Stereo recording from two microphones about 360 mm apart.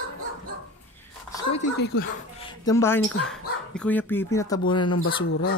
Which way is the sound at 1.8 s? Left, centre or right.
Left.